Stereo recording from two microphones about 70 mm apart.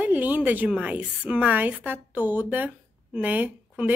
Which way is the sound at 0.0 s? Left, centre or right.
Right.